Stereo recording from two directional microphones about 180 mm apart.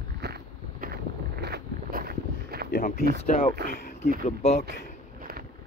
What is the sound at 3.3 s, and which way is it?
Speech, 45° left (ahead or behind).